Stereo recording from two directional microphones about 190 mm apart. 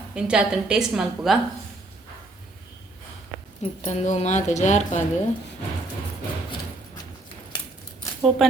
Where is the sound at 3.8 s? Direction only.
35° left (ahead or behind).